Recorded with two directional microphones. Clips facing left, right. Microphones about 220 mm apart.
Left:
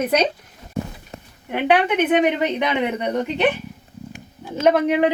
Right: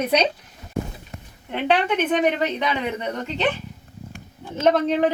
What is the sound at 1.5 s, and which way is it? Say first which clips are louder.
Speech: left 3 dB; 10° left (ahead or behind).